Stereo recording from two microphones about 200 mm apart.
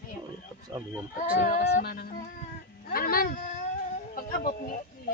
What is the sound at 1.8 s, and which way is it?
Speech, 50° left (ahead or behind).